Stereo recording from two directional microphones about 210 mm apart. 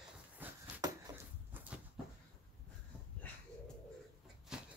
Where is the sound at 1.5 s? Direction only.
10° right (ahead or behind).